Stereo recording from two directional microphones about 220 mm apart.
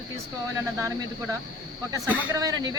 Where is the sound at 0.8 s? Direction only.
15° right (ahead or behind).